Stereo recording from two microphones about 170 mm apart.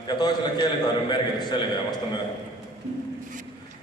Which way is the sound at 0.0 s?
25° left (ahead or behind).